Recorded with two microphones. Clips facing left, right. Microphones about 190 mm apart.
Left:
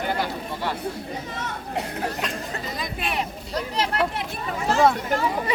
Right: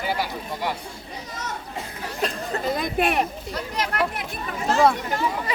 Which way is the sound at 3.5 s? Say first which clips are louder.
Left 2 dB; 30° left (ahead or behind).